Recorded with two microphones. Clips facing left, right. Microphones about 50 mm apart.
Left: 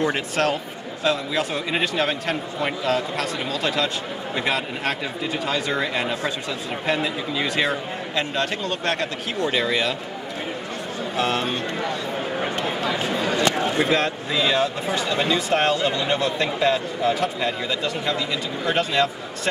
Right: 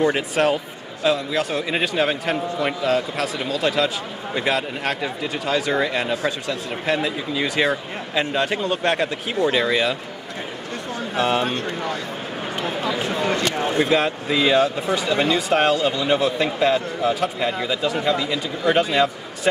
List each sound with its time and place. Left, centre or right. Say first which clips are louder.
0.0 s a man's voice: right 3 dB; centre
11.1 s a man's voice: right 3 dB; centre
12.8 s speech: right 2 dB; right
13.7 s a man's voice: right 2 dB; centre